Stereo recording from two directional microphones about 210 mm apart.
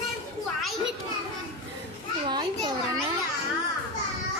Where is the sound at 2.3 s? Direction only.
20° right (ahead or behind).